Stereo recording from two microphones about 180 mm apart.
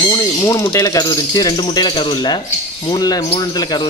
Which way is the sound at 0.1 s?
20° left (ahead or behind).